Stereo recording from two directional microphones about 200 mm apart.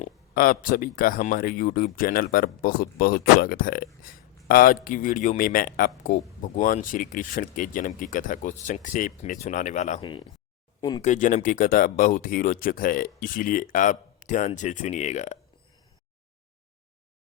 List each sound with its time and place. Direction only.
0.0 s speech: 45° left (ahead or behind)
10.0 s speech: 25° left (ahead or behind)
10.8 s a sound: 20° left (ahead or behind)
11.0 s speech: 40° left (ahead or behind)